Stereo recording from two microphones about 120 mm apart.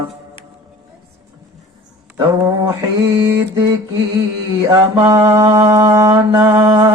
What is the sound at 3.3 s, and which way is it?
Mantra, 25° right (ahead or behind).